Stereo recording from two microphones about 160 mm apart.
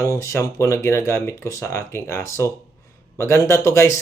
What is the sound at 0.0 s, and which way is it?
Speech, 20° left (ahead or behind).